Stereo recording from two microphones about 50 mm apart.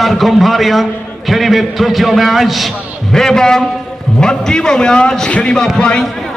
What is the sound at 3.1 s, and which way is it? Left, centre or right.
A man's voice, centre.